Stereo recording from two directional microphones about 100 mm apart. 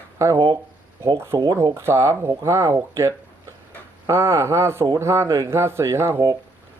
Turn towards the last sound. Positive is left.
turn(degrees=-25)  # may be behind; listen again after turning